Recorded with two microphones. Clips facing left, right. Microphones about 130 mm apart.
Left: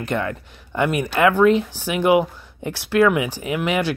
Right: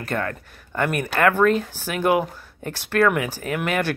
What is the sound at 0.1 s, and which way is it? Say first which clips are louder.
Speech: left 1 dB; 15° left (ahead or behind).